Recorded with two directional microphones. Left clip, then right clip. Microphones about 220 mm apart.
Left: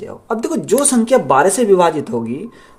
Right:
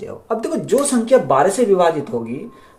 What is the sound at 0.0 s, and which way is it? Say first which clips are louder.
Speech: left 1 dB; 35° left (ahead or behind).